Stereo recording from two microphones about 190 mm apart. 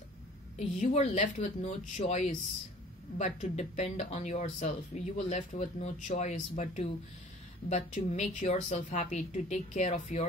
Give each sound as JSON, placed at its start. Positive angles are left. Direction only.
{"t": 0.6, "sound": "speech", "side_deg": 35}